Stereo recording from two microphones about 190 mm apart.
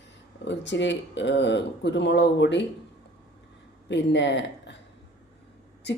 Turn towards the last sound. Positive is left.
turn(degrees=65)  # may be behind; listen again after turning